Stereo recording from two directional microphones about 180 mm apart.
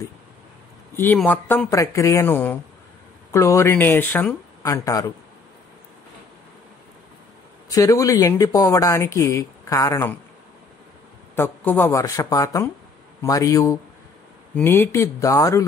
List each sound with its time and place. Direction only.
0.9 s speech: 10° left (ahead or behind)
7.7 s speech: 20° left (ahead or behind)
11.3 s speech: 10° left (ahead or behind)